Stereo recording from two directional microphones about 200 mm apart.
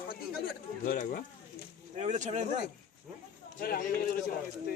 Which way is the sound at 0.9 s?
45° left (ahead or behind).